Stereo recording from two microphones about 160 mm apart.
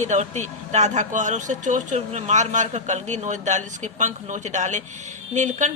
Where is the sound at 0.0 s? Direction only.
45° right (ahead or behind).